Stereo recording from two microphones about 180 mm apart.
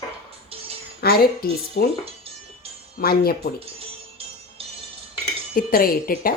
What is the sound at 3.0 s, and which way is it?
Speech, 55° left (ahead or behind).